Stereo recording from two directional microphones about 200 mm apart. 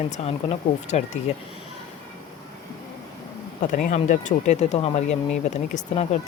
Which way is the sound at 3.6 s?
40° left (ahead or behind).